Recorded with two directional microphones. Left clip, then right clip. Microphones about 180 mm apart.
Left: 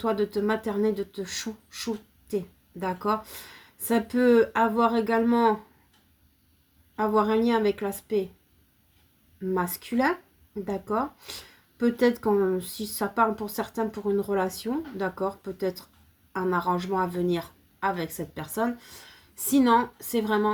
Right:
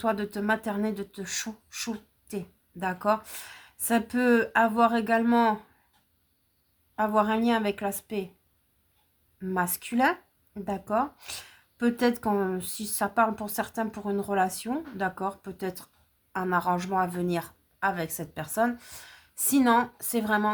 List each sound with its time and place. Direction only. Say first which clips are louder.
0.0 s speech: left 3 dB; 25° right (ahead or behind)
6.9 s speech: left 1 dB; 25° right (ahead or behind)
9.4 s speech: left 1 dB; 25° right (ahead or behind)